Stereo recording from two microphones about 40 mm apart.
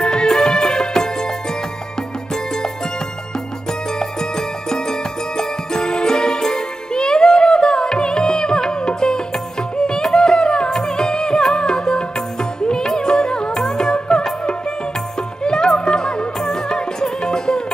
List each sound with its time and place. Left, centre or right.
0.0 s music: centre
4.0 s music: centre
5.4 s jingle bell: centre
9.8 s music: centre
15.4 s music: centre